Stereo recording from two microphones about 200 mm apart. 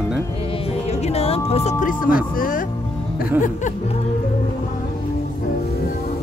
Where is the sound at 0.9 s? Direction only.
30° left (ahead or behind).